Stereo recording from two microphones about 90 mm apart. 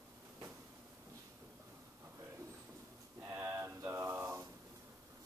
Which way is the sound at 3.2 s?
25° right (ahead or behind).